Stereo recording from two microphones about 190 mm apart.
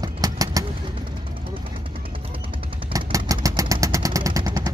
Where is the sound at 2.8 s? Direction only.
20° right (ahead or behind).